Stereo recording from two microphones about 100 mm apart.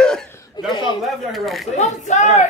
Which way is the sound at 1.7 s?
90° left.